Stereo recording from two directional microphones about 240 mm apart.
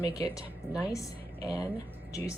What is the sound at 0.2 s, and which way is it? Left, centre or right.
A woman's voice, centre.